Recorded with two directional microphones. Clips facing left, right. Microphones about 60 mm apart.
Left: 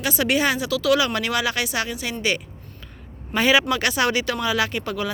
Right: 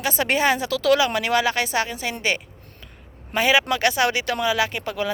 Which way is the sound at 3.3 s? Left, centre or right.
Centre.